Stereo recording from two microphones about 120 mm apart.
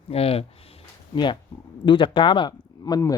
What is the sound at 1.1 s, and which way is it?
A man's voice, 40° left (ahead or behind).